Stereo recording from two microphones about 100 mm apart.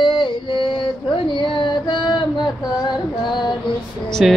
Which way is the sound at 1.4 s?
50° left (ahead or behind).